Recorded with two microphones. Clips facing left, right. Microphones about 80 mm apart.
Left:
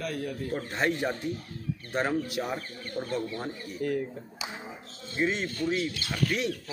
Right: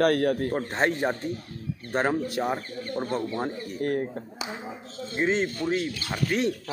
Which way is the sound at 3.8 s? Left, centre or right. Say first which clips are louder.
Right 3 dB; right.